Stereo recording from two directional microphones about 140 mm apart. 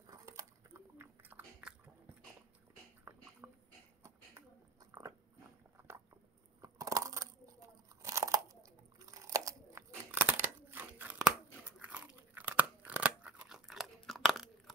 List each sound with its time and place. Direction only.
0.0 s biting: 25° right (ahead or behind)
3.4 s a sound: 15° right (ahead or behind)
6.6 s crushing: 25° right (ahead or behind)
8.0 s crunch: 20° right (ahead or behind); by 14.5 s centre (ahead or behind)